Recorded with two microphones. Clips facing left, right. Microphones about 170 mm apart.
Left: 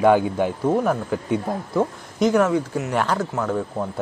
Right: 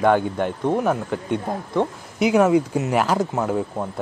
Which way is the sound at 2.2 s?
10° right (ahead or behind).